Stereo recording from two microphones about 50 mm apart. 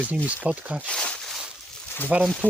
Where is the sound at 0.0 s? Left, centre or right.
Right.